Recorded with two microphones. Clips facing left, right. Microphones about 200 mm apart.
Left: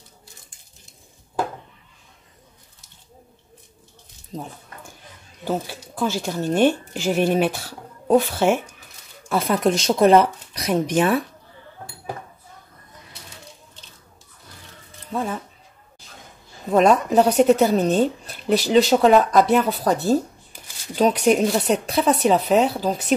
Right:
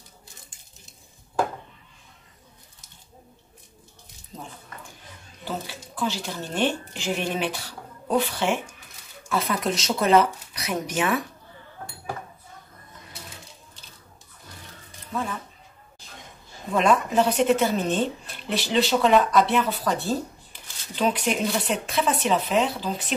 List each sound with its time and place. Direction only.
5.9 s speech: 45° left (ahead or behind)
15.1 s music: 30° left (ahead or behind)
16.7 s speech: 40° left (ahead or behind)